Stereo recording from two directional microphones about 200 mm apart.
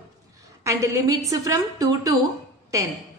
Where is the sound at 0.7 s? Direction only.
15° right (ahead or behind).